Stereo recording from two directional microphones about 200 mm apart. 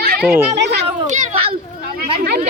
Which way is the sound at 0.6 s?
55° right (ahead or behind).